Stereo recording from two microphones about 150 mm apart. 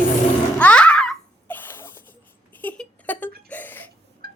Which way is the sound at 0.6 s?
10° left (ahead or behind).